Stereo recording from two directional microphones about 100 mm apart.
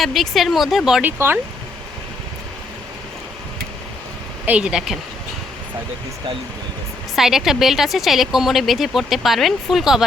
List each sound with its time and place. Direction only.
0.0 s speech: centre (ahead or behind)
1.0 s speech: 20° right (ahead or behind)
4.4 s speech: 10° right (ahead or behind)
7.2 s speech: 5° right (ahead or behind)